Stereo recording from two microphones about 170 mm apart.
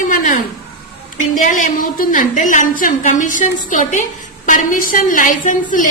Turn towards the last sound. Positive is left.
turn(degrees=50)  # may be behind; listen again after turning